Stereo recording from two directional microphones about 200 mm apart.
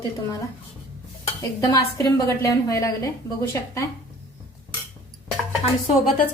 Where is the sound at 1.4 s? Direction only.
15° left (ahead or behind).